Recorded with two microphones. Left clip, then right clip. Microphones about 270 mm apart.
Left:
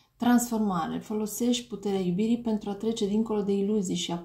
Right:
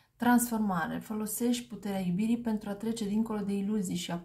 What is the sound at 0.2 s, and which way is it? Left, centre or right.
A woman's voice, right.